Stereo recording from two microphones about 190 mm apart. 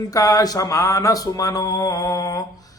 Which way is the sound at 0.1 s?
20° left (ahead or behind).